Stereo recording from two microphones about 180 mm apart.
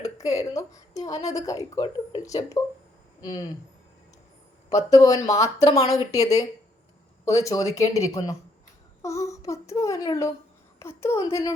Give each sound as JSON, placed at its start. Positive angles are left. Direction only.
{"t": 0.0, "sound": "a woman's voice", "side_deg": 20}
{"t": 4.7, "sound": "a woman's voice", "side_deg": 20}